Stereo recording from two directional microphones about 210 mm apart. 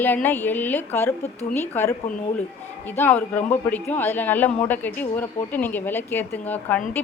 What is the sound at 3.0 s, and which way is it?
Speech, 10° left (ahead or behind).